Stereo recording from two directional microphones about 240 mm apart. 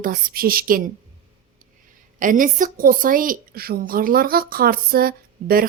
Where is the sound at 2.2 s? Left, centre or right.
Right.